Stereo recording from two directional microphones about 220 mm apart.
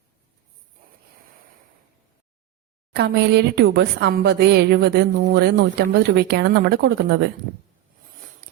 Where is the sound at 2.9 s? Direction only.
50° right (ahead or behind).